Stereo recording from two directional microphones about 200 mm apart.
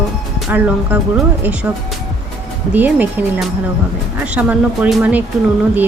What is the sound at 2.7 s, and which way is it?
Speech, 10° right (ahead or behind).